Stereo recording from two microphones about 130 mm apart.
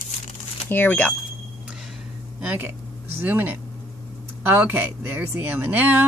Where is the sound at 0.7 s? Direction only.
15° left (ahead or behind).